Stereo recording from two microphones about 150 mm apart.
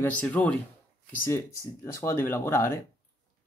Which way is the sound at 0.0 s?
10° left (ahead or behind).